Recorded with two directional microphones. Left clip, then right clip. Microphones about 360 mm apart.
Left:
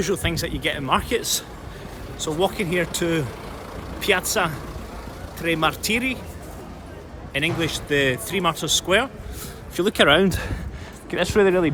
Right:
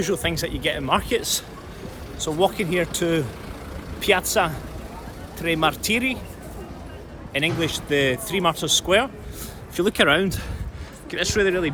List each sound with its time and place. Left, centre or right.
0.0 s speech: centre
7.3 s speech: centre
10.2 s speech: left